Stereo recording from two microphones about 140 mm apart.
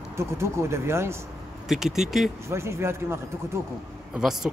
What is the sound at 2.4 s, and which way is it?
Speech, 20° right (ahead or behind).